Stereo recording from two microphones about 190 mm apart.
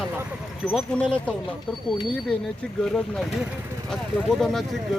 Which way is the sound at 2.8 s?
Centre (ahead or behind).